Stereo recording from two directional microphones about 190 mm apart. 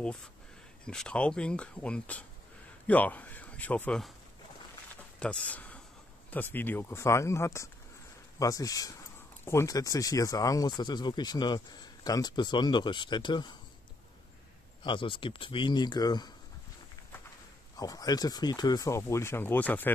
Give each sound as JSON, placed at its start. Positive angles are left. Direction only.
{"t": 0.8, "sound": "speech", "side_deg": 5}
{"t": 5.2, "sound": "speech", "side_deg": 5}
{"t": 14.8, "sound": "speech", "side_deg": 25}
{"t": 17.7, "sound": "speech", "side_deg": 20}